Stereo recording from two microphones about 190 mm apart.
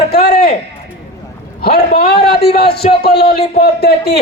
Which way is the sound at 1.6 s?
55° left (ahead or behind).